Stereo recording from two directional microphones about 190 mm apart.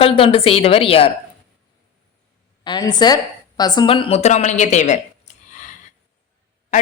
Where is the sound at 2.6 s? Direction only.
20° left (ahead or behind); by 5.3 s 40° left (ahead or behind).